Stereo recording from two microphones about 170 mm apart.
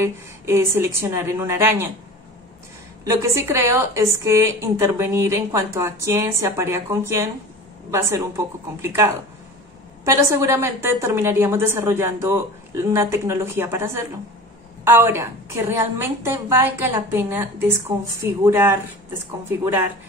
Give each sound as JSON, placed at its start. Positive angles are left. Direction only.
{"t": 0.0, "sound": "a woman's voice", "side_deg": -15}
{"t": 3.2, "sound": "a woman's voice", "side_deg": -15}